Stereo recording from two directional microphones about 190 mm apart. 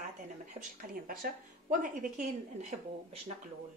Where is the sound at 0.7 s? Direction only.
50° right (ahead or behind).